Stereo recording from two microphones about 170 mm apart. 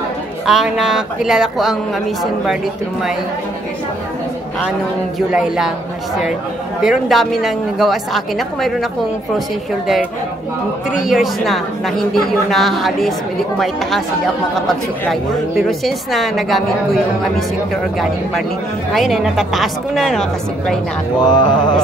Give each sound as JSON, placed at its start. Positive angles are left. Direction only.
{"t": 0.5, "sound": "a woman's voice", "side_deg": -5}
{"t": 5.3, "sound": "a woman's voice", "side_deg": -5}
{"t": 6.8, "sound": "a woman's voice", "side_deg": 0}
{"t": 11.1, "sound": "a woman's voice", "side_deg": 0}
{"t": 18.9, "sound": "a woman's voice", "side_deg": 0}
{"t": 21.2, "sound": "a sound", "side_deg": 25}